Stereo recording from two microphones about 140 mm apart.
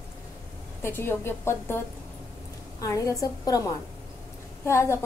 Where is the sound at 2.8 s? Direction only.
25° left (ahead or behind).